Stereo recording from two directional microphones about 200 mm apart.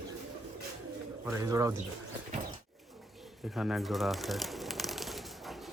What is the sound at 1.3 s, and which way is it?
Speech, 15° right (ahead or behind).